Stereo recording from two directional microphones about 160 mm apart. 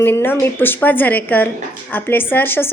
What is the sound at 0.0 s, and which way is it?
A woman's voice, 15° left (ahead or behind).